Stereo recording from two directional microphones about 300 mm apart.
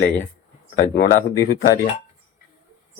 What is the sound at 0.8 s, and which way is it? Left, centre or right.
Speech, left.